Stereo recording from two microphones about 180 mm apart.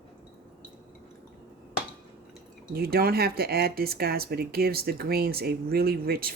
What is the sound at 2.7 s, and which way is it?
Speech, 60° right (ahead or behind).